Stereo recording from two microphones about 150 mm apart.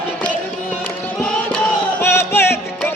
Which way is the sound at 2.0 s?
15° left (ahead or behind).